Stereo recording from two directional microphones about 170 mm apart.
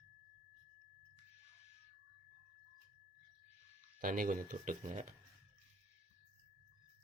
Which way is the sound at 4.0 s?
55° right (ahead or behind).